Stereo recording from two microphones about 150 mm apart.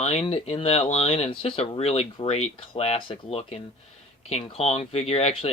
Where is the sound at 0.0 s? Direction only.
45° left (ahead or behind).